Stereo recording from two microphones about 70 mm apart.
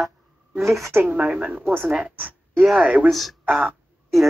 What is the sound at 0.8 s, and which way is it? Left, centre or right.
Speech, right.